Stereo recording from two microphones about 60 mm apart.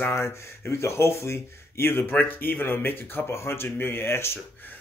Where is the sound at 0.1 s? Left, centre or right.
Left.